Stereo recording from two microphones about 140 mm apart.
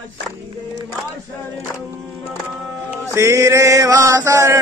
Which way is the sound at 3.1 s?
20° right (ahead or behind).